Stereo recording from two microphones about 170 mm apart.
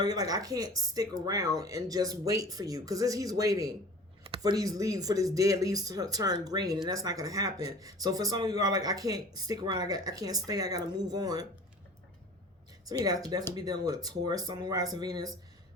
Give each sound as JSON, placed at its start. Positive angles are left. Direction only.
{"t": 0.0, "sound": "speech", "side_deg": -20}
{"t": 4.2, "sound": "a sound", "side_deg": -30}
{"t": 4.5, "sound": "speech", "side_deg": -20}
{"t": 12.9, "sound": "speech", "side_deg": -20}